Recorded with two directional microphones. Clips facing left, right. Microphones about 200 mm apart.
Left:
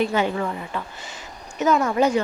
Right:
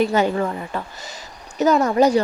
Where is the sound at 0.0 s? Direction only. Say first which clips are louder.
Right 3 dB; 40° right (ahead or behind).